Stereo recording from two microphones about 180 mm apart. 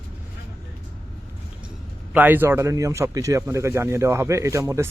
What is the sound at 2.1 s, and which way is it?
Speech, 10° right (ahead or behind).